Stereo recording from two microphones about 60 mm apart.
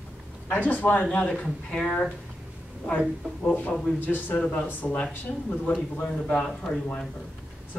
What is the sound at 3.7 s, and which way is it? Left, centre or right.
Speech, centre.